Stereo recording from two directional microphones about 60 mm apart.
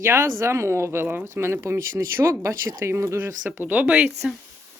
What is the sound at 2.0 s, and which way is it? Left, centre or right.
Speech, right.